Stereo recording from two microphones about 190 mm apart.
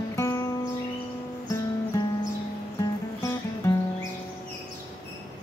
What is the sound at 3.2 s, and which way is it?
Music, 15° left (ahead or behind).